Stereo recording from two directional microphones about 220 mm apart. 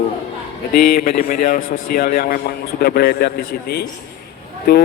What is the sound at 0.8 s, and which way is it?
A man's voice, 40° left (ahead or behind).